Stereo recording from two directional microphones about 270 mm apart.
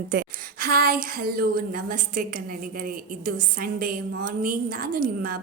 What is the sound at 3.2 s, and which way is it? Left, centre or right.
A woman's voice, right.